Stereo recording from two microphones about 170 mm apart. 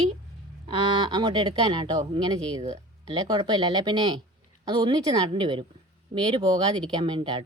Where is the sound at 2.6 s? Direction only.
40° right (ahead or behind).